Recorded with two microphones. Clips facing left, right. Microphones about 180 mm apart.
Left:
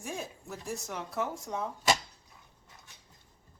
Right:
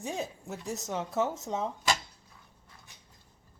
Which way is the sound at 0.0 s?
20° right (ahead or behind).